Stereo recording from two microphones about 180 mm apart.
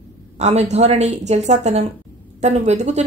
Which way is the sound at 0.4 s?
40° right (ahead or behind).